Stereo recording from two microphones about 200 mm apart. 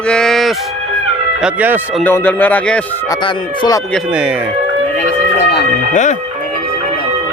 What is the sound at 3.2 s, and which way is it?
Speech, 25° left (ahead or behind).